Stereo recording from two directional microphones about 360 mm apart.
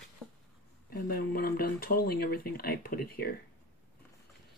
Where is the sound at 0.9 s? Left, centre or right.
Left.